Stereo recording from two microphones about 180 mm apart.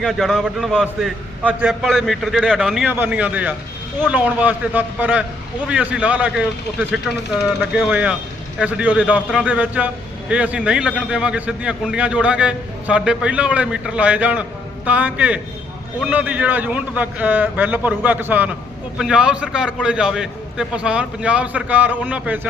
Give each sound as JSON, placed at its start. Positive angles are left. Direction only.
{"t": 0.0, "sound": "a man's voice", "side_deg": 0}